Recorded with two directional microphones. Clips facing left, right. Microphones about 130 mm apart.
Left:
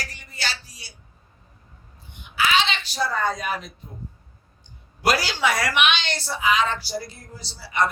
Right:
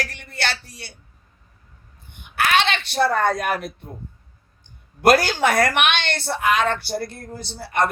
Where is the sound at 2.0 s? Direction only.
55° right (ahead or behind).